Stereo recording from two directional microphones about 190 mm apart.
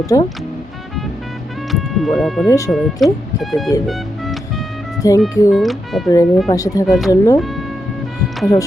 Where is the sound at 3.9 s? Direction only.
Centre (ahead or behind).